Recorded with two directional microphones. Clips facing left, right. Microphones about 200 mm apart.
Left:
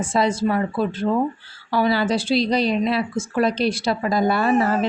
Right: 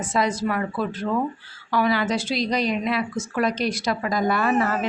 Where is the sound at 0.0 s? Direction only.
30° left (ahead or behind).